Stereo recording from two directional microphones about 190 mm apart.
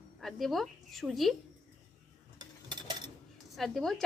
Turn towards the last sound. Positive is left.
turn(degrees=0)  # may be behind; listen again after turning